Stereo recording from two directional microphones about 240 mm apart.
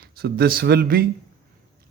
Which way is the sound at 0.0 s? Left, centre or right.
Right.